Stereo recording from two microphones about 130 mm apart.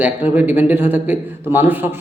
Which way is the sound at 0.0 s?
15° right (ahead or behind).